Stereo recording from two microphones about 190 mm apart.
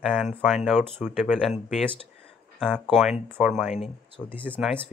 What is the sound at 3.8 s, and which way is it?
Speech, 25° left (ahead or behind).